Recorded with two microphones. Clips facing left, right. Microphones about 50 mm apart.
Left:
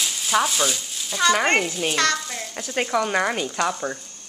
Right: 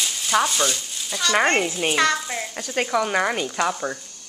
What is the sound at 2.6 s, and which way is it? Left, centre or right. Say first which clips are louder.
A child's voice: even; centre.